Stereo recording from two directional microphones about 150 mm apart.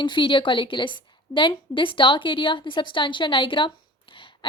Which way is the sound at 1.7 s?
35° left (ahead or behind).